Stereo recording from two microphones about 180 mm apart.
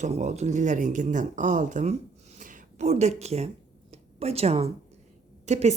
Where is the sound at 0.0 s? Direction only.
40° right (ahead or behind).